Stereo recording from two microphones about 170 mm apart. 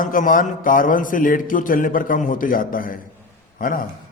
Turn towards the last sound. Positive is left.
turn(degrees=55)  # may be behind; listen again after turning